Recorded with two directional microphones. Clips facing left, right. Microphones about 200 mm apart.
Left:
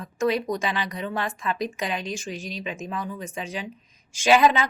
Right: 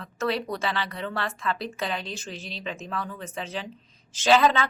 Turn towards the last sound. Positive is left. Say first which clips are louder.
# left 2 dB
turn(degrees=15)  # may be behind; listen again after turning